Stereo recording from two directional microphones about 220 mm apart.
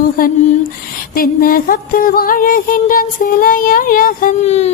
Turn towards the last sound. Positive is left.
turn(degrees=30)  # may be behind; listen again after turning